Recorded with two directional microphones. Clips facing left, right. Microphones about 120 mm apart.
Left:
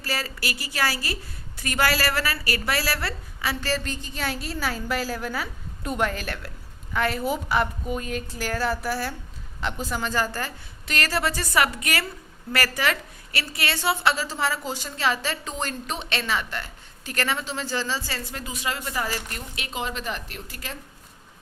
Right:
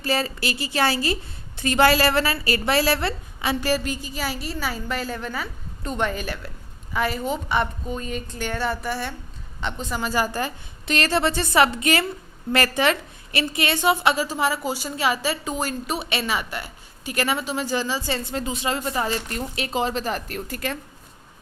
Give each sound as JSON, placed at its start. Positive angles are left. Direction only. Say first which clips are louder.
{"t": 0.0, "sound": "a woman's voice", "louder": "right 6 dB", "side_deg": -25}
{"t": 19.4, "sound": "a woman's voice", "louder": "right 7 dB", "side_deg": -35}